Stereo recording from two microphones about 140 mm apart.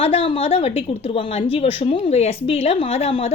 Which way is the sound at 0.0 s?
45° left (ahead or behind).